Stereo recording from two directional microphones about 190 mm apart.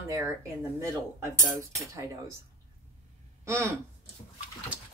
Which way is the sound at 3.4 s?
15° right (ahead or behind).